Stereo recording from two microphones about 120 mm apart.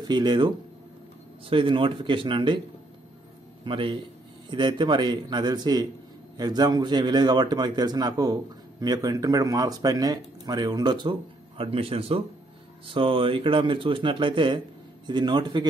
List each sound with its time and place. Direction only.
0.0 s speech: 35° right (ahead or behind)
1.5 s speech: 45° right (ahead or behind)
3.6 s speech: 45° right (ahead or behind)